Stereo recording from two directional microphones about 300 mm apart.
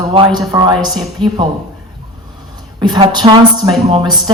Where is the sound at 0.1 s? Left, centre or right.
Centre.